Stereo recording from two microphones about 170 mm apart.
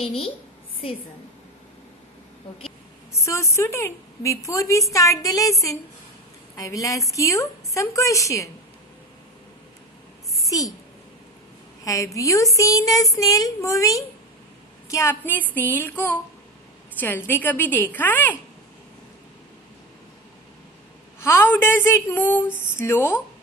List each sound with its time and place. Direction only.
0.0 s a woman's voice: 35° left (ahead or behind)
3.1 s speech: 15° left (ahead or behind)
10.5 s speech: 20° left (ahead or behind)
11.8 s speech: 20° left (ahead or behind)
21.2 s speech: 15° left (ahead or behind)